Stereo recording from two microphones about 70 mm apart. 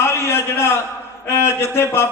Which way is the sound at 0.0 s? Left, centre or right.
Left.